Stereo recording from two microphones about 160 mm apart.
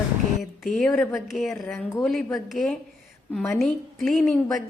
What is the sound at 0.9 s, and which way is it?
Speech, 15° left (ahead or behind).